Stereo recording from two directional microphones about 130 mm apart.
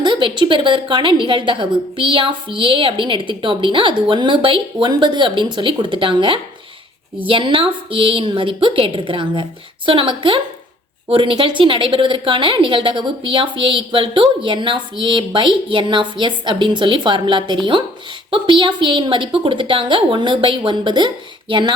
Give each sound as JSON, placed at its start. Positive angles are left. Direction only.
{"t": 0.0, "sound": "a woman's voice", "side_deg": -40}